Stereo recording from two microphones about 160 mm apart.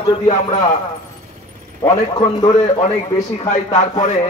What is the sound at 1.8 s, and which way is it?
Speech, 25° left (ahead or behind).